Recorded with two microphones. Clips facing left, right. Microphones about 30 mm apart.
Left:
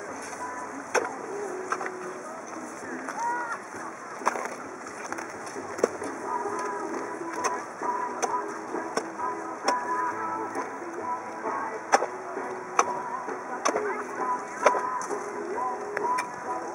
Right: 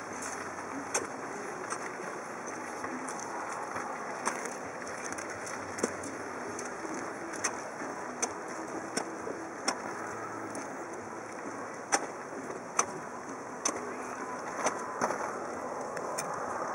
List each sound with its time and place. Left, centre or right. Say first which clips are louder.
0.9 s vehicle: left 10 dB; left
4.2 s a sound: left 9 dB; centre
5.8 s bird: left 8 dB; centre
6.6 s music: left 6 dB; centre
11.9 s vehicle: left 9 dB; left
12.8 s music: left 9 dB; left
13.7 s chop: left 9 dB; left
14.6 s vehicle: left 11 dB; left